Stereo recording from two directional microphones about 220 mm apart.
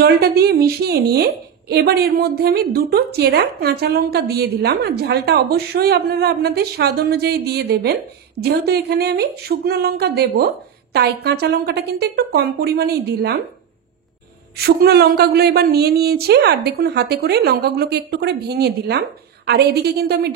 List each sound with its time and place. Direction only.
0.0 s a woman's voice: 45° right (ahead or behind)
14.6 s a woman's voice: 45° right (ahead or behind)